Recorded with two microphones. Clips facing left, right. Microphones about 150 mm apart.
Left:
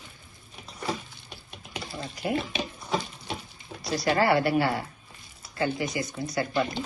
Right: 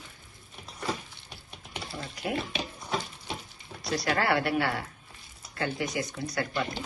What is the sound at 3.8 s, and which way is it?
A woman's voice, centre (ahead or behind).